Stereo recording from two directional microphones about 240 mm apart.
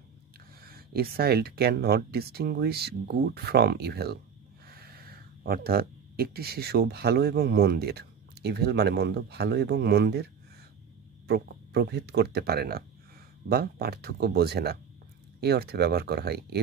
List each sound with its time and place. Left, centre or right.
0.7 s speech: right